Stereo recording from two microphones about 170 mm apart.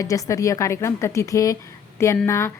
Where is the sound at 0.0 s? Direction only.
20° left (ahead or behind).